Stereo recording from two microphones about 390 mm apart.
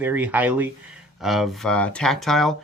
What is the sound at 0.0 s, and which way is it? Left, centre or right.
Speech, centre.